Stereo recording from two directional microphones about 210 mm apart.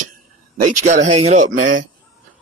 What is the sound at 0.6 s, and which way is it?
Speech, 35° right (ahead or behind).